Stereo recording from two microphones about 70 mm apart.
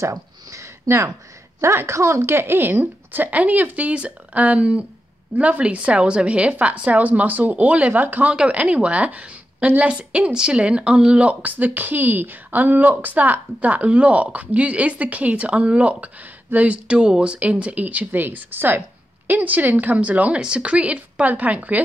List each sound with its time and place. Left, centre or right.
0.0 s a sound: right
0.9 s speech: right
1.6 s a woman's voice: right